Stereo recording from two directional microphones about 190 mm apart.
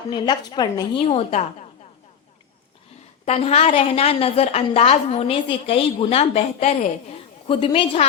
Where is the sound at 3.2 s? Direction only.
35° left (ahead or behind).